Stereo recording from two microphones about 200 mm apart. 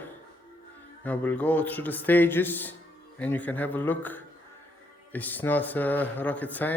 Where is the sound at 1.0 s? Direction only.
10° left (ahead or behind).